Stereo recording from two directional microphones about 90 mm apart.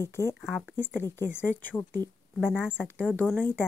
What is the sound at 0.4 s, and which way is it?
Speech, centre (ahead or behind).